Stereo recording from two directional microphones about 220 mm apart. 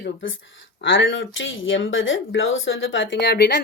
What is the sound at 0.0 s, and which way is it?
Speech, 55° left (ahead or behind).